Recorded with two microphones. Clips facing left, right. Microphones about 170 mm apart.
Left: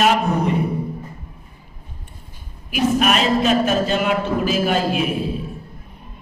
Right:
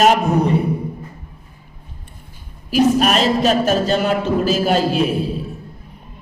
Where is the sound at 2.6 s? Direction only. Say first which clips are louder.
Right 3 dB; 35° right (ahead or behind).